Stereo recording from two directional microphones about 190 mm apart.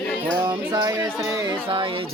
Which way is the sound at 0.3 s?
20° right (ahead or behind).